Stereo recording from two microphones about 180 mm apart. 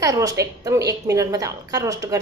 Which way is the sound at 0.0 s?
20° right (ahead or behind).